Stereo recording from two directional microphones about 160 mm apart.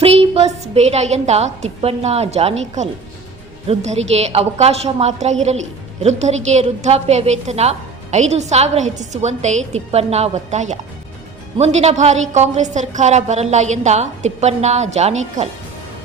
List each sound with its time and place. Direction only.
0.0 s a woman's voice: 40° right (ahead or behind)